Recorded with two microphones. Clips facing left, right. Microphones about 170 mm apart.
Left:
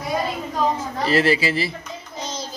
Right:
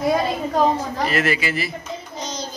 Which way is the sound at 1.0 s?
30° left (ahead or behind).